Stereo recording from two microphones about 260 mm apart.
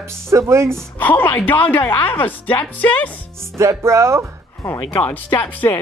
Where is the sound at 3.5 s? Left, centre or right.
Centre.